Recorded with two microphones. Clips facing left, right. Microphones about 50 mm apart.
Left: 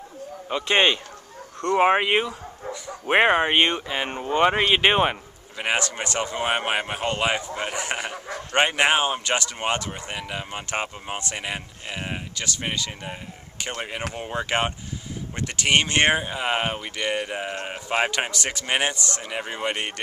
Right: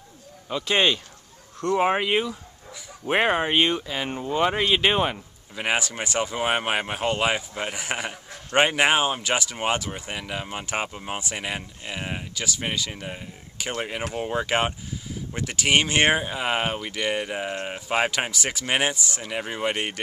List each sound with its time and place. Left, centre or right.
0.5 s speech: left
5.6 s speech: centre